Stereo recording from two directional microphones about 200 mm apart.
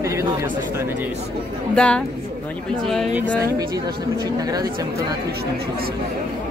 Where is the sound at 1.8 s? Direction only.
5° left (ahead or behind).